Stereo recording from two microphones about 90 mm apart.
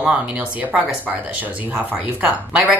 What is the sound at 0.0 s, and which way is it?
Speech, 15° right (ahead or behind).